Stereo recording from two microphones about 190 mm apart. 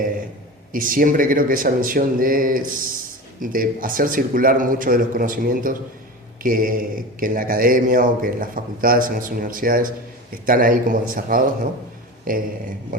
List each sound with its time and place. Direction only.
0.7 s speech: 45° right (ahead or behind)